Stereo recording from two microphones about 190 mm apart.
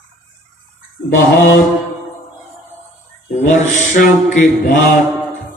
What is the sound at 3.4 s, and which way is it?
Mantra, 40° left (ahead or behind).